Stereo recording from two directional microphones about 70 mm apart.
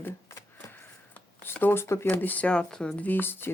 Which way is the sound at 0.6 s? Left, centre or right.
Left.